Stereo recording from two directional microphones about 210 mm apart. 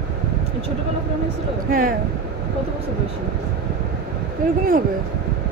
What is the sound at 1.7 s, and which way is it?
Speech, 40° right (ahead or behind).